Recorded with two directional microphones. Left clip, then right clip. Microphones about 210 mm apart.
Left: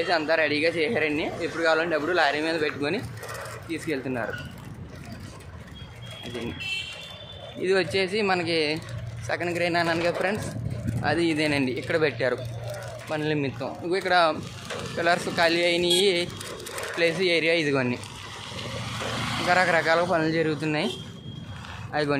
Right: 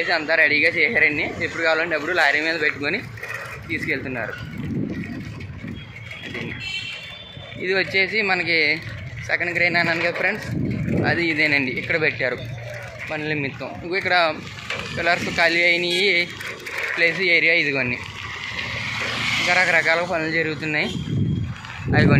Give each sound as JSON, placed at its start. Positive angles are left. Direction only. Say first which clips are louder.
{"t": 0.0, "sound": "speech", "louder": "right 5 dB", "side_deg": 5}
{"t": 7.6, "sound": "speech", "louder": "right 4 dB", "side_deg": 5}
{"t": 19.1, "sound": "speech", "louder": "right 4 dB", "side_deg": 10}
{"t": 21.9, "sound": "speech", "louder": "right 7 dB", "side_deg": 0}